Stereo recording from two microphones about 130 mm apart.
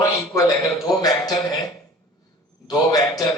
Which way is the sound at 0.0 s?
25° left (ahead or behind).